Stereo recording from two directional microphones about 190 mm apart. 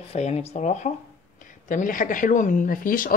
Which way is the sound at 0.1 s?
35° left (ahead or behind).